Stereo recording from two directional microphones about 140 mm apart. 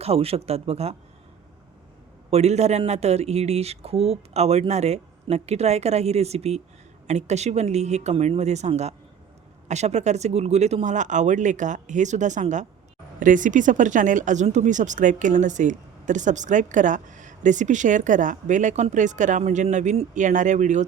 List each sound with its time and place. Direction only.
0.0 s speech: 45° right (ahead or behind)
2.3 s speech: 50° right (ahead or behind)